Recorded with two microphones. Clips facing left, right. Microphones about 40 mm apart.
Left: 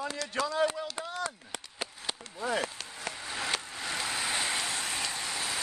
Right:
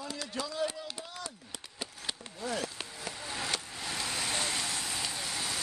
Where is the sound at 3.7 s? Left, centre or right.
Centre; by 5.1 s left.